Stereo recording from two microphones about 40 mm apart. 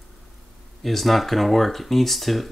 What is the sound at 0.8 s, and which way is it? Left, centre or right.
Speech, centre.